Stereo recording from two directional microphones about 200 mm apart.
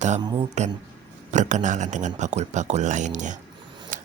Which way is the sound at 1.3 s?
35° right (ahead or behind).